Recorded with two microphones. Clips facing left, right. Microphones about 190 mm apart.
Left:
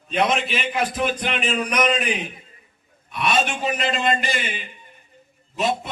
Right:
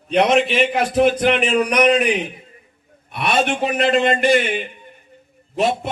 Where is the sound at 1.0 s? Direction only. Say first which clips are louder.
Right 9 dB; 65° right (ahead or behind).